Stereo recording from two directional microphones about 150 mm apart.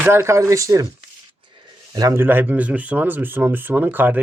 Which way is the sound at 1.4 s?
35° right (ahead or behind).